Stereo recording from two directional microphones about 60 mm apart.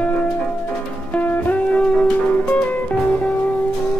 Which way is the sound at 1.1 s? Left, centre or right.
Left.